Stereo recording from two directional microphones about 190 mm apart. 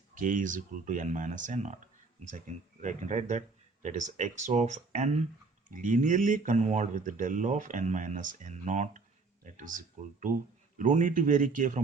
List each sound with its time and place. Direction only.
0.1 s speech: 45° right (ahead or behind)